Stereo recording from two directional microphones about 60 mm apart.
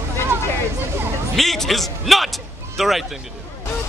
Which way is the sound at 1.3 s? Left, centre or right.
Centre.